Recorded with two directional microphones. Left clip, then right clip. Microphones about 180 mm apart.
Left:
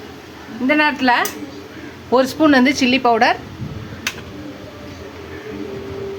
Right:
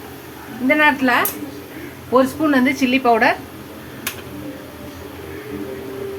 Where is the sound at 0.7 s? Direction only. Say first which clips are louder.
Even; 35° left (ahead or behind).